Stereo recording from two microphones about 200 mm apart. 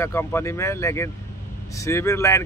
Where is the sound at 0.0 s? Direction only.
15° left (ahead or behind).